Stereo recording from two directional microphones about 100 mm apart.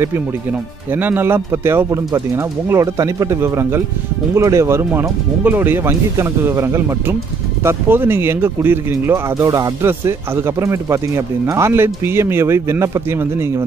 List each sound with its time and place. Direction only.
0.5 s speech: 20° right (ahead or behind)